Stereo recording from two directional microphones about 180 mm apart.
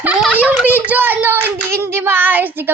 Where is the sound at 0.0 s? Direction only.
5° right (ahead or behind).